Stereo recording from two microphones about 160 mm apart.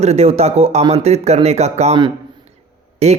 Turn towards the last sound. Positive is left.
turn(degrees=-45)  # may be behind; listen again after turning